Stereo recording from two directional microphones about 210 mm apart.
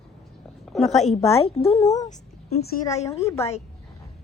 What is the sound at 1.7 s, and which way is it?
Speech, 15° left (ahead or behind).